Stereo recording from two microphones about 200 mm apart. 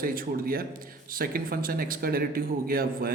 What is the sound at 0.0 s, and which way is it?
Speech, 45° right (ahead or behind).